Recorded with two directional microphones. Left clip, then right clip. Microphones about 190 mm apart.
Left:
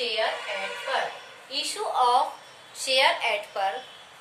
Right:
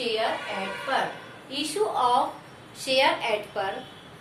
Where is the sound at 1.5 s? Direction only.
5° left (ahead or behind).